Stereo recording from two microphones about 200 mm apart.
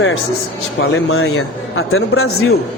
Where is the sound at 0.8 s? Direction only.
90° left.